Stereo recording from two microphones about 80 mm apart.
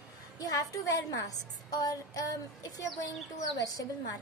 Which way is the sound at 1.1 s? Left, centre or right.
Left.